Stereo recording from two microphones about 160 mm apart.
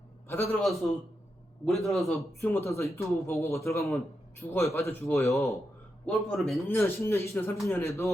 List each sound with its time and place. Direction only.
0.3 s speech: 15° left (ahead or behind)
0.6 s a man's voice: centre (ahead or behind)
2.4 s speech: 15° left (ahead or behind)
6.1 s a man's voice: centre (ahead or behind)
6.7 s speech: 15° left (ahead or behind)